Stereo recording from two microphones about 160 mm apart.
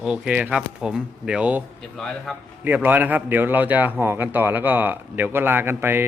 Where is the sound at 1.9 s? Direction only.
Centre (ahead or behind).